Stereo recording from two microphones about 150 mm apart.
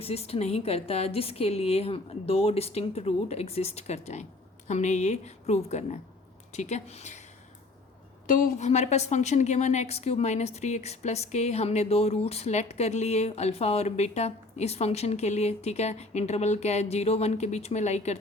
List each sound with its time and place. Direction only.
0.0 s a woman's voice: 40° left (ahead or behind)
8.3 s a woman's voice: 55° left (ahead or behind)